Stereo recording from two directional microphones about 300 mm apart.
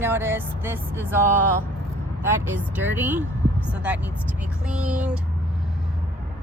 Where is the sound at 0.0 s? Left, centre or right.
Centre.